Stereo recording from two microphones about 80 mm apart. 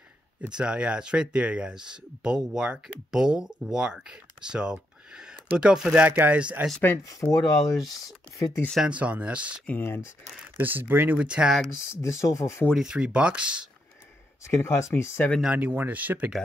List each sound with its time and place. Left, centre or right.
0.5 s speech: centre
7.3 s speech: left
8.4 s speech: left
8.8 s speech: centre
9.7 s speech: left
10.6 s speech: right
12.0 s speech: left
12.7 s speech: centre
14.4 s speech: left
15.5 s speech: right